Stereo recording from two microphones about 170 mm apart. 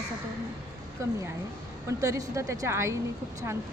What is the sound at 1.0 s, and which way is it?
Speech, 15° right (ahead or behind).